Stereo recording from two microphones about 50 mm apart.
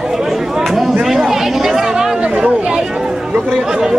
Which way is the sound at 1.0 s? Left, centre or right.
Centre.